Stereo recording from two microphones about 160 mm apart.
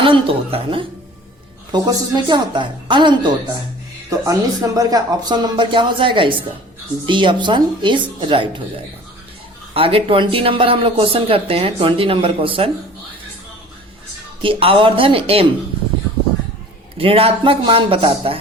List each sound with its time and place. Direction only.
0.0 s speech: 35° right (ahead or behind)
9.7 s speech: 35° right (ahead or behind)
14.4 s speech: 35° right (ahead or behind)
17.0 s speech: 35° right (ahead or behind)